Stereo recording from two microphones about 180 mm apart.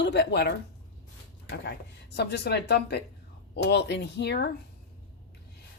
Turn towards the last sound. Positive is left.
turn(degrees=65)  # may be behind; listen again after turning